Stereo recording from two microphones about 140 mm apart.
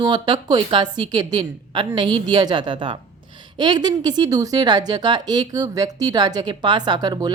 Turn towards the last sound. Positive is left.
turn(degrees=-30)  # may be behind; listen again after turning